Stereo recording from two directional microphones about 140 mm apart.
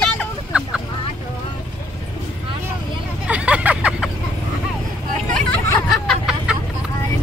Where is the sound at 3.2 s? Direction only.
10° right (ahead or behind).